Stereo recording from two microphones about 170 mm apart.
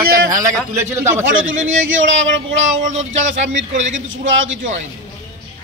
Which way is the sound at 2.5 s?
45° right (ahead or behind).